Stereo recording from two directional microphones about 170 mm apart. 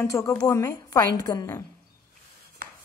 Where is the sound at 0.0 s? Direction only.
15° left (ahead or behind).